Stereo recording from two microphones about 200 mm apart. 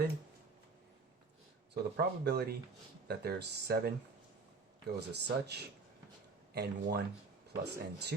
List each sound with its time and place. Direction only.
1.7 s speech: 55° right (ahead or behind)
4.9 s speech: 55° right (ahead or behind)